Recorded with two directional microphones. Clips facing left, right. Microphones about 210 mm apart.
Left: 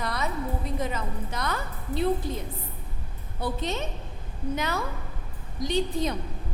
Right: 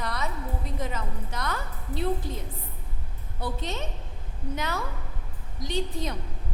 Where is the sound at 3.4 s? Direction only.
15° left (ahead or behind).